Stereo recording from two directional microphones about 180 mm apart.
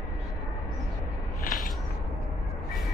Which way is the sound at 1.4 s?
50° left (ahead or behind).